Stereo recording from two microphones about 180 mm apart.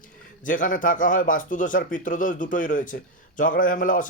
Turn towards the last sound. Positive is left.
turn(degrees=50)  # may be behind; listen again after turning